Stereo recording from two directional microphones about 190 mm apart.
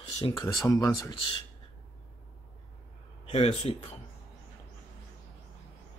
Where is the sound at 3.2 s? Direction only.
30° left (ahead or behind).